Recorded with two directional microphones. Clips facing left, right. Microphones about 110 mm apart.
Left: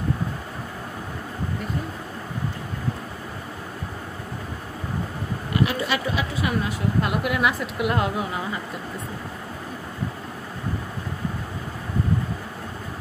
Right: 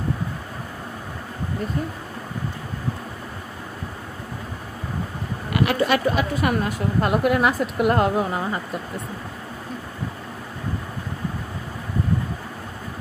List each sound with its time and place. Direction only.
5.5 s speech: 55° right (ahead or behind)